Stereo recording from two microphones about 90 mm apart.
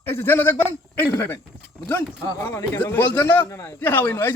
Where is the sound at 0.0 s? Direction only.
25° left (ahead or behind).